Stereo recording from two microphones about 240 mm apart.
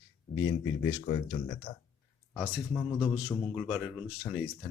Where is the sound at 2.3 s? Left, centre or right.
Centre.